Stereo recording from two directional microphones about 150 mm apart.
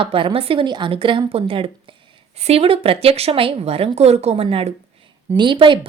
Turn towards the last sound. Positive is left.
turn(degrees=-35)  # may be behind; listen again after turning